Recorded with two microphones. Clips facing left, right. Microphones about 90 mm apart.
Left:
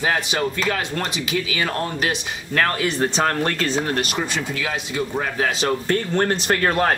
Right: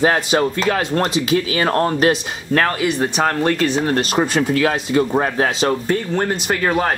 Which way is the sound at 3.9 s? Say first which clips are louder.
Right 7 dB; 45° right (ahead or behind).